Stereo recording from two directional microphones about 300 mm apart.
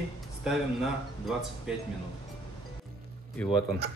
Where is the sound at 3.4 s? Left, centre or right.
Centre.